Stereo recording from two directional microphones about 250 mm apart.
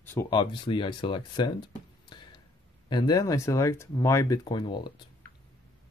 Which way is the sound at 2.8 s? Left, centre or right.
Centre.